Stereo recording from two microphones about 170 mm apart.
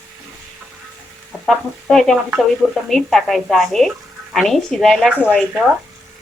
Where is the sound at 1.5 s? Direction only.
Centre (ahead or behind).